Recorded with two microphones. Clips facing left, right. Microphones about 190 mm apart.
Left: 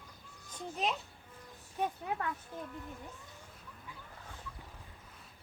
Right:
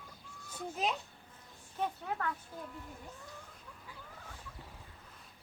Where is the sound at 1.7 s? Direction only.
20° left (ahead or behind).